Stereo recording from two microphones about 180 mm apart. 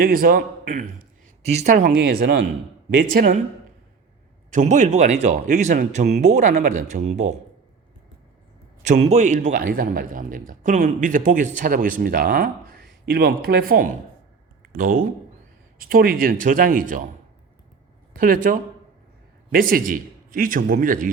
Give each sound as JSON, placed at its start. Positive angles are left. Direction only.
{"t": 0.0, "sound": "a man's voice", "side_deg": -55}
{"t": 4.5, "sound": "a man's voice", "side_deg": -45}
{"t": 8.8, "sound": "a man's voice", "side_deg": -40}
{"t": 18.1, "sound": "a man's voice", "side_deg": -50}